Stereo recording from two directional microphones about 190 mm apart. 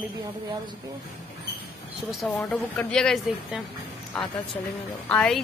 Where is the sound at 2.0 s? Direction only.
Centre (ahead or behind).